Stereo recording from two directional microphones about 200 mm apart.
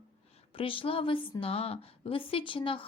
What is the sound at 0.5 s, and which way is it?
A woman's voice, 25° left (ahead or behind).